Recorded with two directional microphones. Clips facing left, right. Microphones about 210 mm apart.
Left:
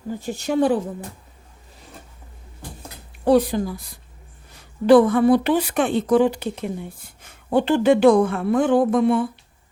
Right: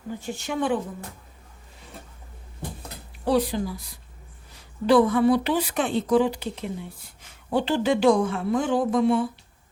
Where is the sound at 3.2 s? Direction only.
50° left (ahead or behind).